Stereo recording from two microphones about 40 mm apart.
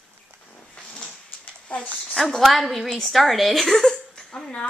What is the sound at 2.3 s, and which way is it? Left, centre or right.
A woman's voice, centre.